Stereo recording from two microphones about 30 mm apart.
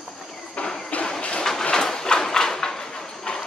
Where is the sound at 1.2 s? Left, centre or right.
Left.